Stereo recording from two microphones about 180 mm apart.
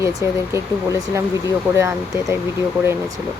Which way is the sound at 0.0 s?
15° right (ahead or behind).